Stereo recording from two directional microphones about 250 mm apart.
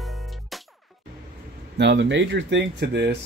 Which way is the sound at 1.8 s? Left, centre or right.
Right.